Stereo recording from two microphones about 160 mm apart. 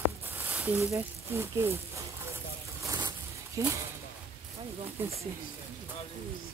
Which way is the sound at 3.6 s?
20° right (ahead or behind).